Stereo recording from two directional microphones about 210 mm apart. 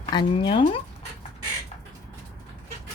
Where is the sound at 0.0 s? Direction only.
20° left (ahead or behind).